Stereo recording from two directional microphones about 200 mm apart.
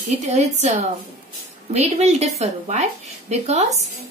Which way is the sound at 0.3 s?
35° right (ahead or behind).